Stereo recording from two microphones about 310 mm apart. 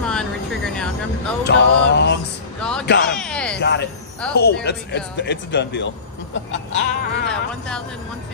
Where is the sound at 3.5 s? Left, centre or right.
Left.